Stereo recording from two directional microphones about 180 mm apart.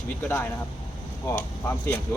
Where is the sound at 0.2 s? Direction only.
10° left (ahead or behind).